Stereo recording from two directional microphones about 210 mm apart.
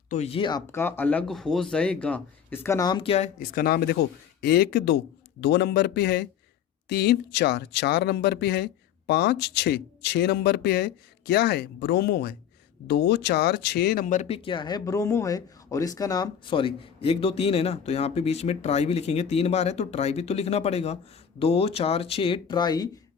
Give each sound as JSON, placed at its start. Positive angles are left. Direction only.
{"t": 0.1, "sound": "speech", "side_deg": 30}
{"t": 3.5, "sound": "speech", "side_deg": 45}